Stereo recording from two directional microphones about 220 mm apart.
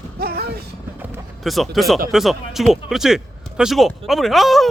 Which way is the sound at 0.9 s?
10° right (ahead or behind).